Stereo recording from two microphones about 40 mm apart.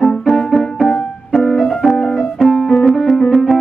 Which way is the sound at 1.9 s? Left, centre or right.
Centre.